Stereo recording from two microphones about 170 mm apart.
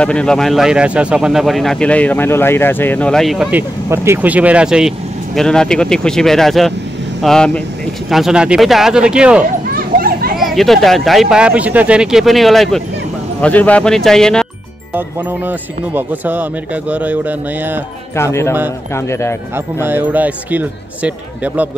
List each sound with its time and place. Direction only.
0.0 s speech: 5° left (ahead or behind)
3.9 s speech: 15° right (ahead or behind)
9.8 s children playing: 60° right (ahead or behind)
10.3 s speech: centre (ahead or behind)
15.0 s speech: 10° right (ahead or behind)
18.1 s speech: 15° left (ahead or behind)
19.5 s speech: 10° right (ahead or behind)